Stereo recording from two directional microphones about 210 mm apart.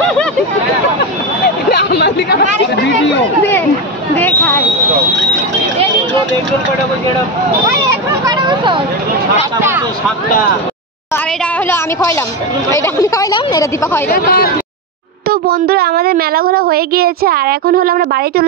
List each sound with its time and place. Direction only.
1.7 s hubbub: 50° left (ahead or behind)
4.2 s a sound: 10° left (ahead or behind)
7.8 s speech: 20° right (ahead or behind)
9.6 s speech: 10° right (ahead or behind)
11.6 s a woman's voice: 10° left (ahead or behind)
14.0 s speech: 45° left (ahead or behind)
15.2 s a woman's voice: 50° right (ahead or behind)